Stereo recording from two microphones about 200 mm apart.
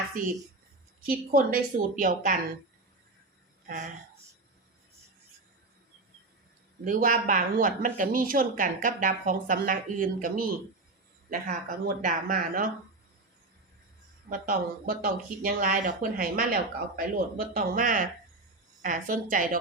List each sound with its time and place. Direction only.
0.1 s speech: 45° right (ahead or behind)
3.7 s speech: 40° right (ahead or behind)
6.8 s speech: 40° right (ahead or behind)
14.3 s speech: 45° right (ahead or behind)